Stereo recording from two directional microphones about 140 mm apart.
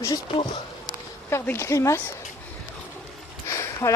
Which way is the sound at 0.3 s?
40° left (ahead or behind).